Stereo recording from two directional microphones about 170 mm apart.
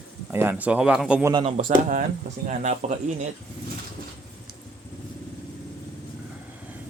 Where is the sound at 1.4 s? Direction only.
50° right (ahead or behind).